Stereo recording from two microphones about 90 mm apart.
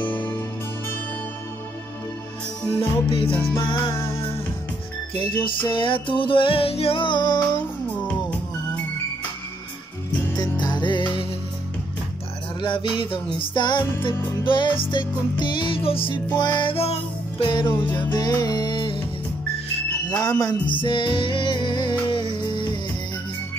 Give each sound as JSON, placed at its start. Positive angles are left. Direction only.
{"t": 0.0, "sound": "music", "side_deg": 20}
{"t": 2.8, "sound": "music", "side_deg": 80}
{"t": 3.5, "sound": "music", "side_deg": 65}
{"t": 3.9, "sound": "music", "side_deg": 30}
{"t": 5.2, "sound": "music", "side_deg": 65}
{"t": 7.9, "sound": "music", "side_deg": 15}
{"t": 10.6, "sound": "music", "side_deg": 55}
{"t": 12.6, "sound": "music", "side_deg": 65}
{"t": 16.3, "sound": "music", "side_deg": 60}
{"t": 17.5, "sound": "music", "side_deg": 55}
{"t": 20.2, "sound": "music", "side_deg": 40}
{"t": 20.7, "sound": "music", "side_deg": 65}